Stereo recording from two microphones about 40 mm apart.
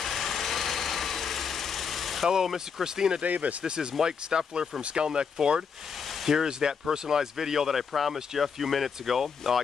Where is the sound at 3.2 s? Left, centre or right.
Right.